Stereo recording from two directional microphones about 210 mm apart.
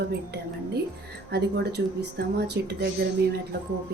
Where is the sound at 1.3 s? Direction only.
50° right (ahead or behind).